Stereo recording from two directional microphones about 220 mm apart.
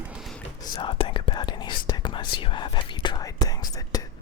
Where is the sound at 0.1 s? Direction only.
Centre (ahead or behind).